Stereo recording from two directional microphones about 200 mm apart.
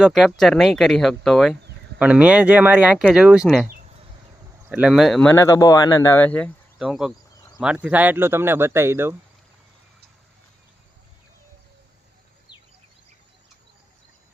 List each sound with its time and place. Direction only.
0.0 s speech: centre (ahead or behind)
3.7 s a sound: 40° right (ahead or behind)
4.7 s speech: 5° right (ahead or behind)